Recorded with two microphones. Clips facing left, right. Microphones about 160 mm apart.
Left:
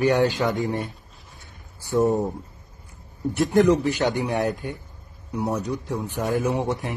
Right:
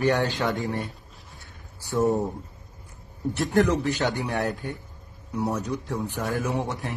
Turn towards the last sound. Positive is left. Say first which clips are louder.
# left 4 dB
turn(degrees=20)  # may be behind; listen again after turning